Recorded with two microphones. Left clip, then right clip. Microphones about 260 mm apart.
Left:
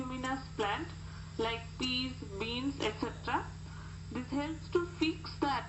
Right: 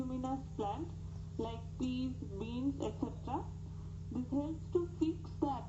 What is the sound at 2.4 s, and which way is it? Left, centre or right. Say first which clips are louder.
A woman's voice: left 4 dB; left.